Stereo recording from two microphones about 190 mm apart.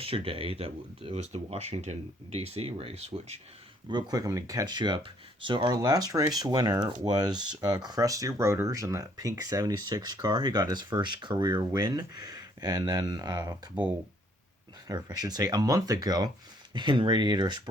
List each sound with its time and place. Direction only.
0.0 s speech: 30° right (ahead or behind)
3.8 s speech: 20° right (ahead or behind)
14.8 s speech: 20° right (ahead or behind)